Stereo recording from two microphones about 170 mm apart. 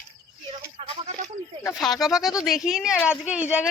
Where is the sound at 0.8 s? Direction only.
35° right (ahead or behind).